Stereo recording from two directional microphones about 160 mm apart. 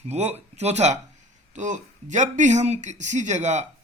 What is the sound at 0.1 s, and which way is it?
A man's voice, 40° right (ahead or behind).